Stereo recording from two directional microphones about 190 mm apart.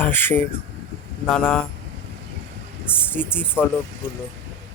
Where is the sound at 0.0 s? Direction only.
10° left (ahead or behind).